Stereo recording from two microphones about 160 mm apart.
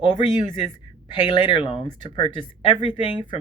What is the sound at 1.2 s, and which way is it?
Speech, 30° left (ahead or behind).